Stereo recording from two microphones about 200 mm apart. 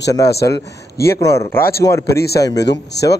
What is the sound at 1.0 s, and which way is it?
Speech, 15° left (ahead or behind).